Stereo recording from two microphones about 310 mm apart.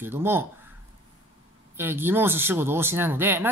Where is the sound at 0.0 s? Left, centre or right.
Centre.